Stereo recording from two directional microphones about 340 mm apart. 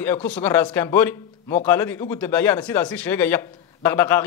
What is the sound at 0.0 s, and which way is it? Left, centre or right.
A man's voice, centre.